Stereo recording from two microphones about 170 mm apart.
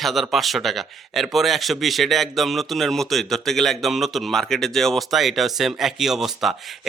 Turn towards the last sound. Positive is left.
turn(degrees=0)  # may be behind; listen again after turning